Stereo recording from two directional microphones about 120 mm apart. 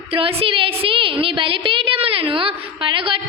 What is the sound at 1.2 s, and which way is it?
A woman's voice, 45° right (ahead or behind).